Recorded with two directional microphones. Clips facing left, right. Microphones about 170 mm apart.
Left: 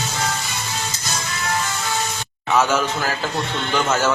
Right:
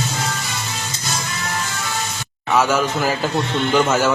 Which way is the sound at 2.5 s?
5° right (ahead or behind).